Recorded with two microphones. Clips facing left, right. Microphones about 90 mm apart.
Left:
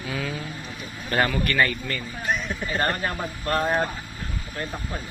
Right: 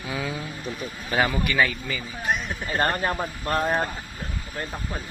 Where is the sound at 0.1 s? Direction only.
15° right (ahead or behind).